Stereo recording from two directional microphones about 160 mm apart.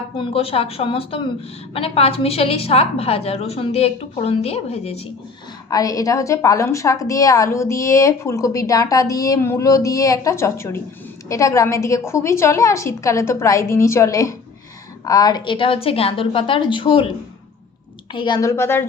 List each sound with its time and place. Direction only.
0.2 s a woman's voice: 35° left (ahead or behind)
5.7 s a woman's voice: 20° left (ahead or behind)
18.1 s a woman's voice: 30° left (ahead or behind)